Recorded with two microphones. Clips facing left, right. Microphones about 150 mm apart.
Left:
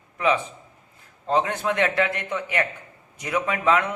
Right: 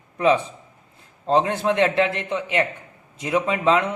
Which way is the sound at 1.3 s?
30° right (ahead or behind).